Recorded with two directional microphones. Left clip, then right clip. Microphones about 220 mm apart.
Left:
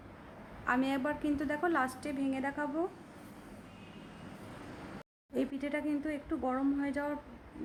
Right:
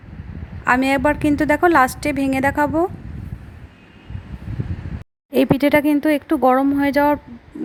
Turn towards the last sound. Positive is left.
turn(degrees=-35)  # may be behind; listen again after turning